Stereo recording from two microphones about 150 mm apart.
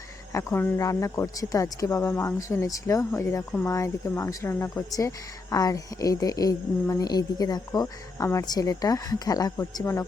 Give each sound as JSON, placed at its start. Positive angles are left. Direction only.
{"t": 0.3, "sound": "speech", "side_deg": 15}